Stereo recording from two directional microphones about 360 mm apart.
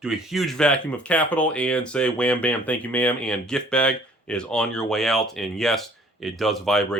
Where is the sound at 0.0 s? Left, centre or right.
Centre.